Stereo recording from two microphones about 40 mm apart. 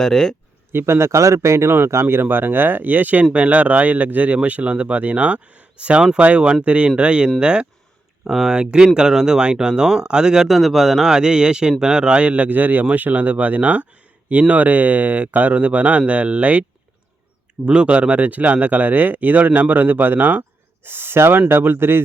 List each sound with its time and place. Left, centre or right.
0.0 s speech: centre
0.7 s speech: right
2.2 s speech: right; by 10.5 s centre
10.5 s speech: centre; by 16.6 s right
17.7 s speech: right
20.8 s speech: right